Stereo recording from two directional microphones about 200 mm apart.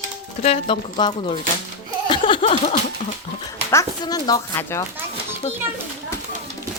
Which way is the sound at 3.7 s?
15° left (ahead or behind).